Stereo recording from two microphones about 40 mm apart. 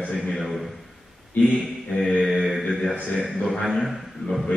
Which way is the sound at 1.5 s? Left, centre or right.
Centre.